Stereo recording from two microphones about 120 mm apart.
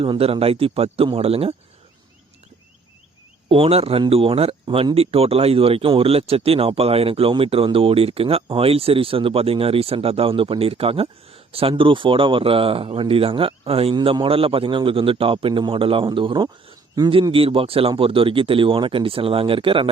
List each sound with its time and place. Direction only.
0.0 s speech: 50° right (ahead or behind)
3.5 s speech: 55° right (ahead or behind)
13.9 s speech: 45° right (ahead or behind)